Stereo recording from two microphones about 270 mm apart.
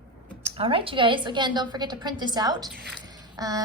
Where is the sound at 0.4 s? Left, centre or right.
Right.